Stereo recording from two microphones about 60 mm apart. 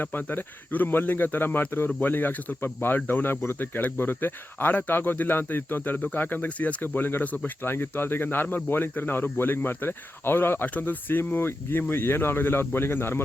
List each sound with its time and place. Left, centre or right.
0.0 s speech: left